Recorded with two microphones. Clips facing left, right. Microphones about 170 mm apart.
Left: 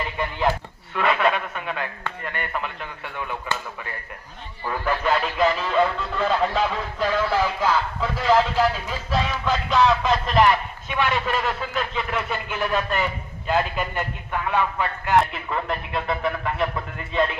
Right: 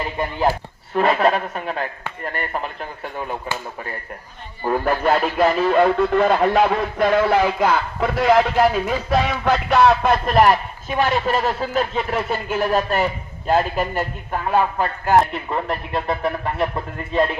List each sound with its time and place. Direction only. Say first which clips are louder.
0.0 s a man's voice: right 3 dB; 40° right (ahead or behind)
4.6 s a man's voice: right 5 dB; 50° right (ahead or behind)